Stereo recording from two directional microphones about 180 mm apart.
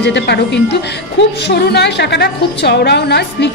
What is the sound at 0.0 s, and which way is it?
Speech, 70° left (ahead or behind).